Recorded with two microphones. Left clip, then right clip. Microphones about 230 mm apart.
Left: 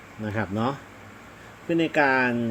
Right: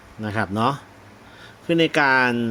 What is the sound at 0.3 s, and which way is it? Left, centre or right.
Speech, right.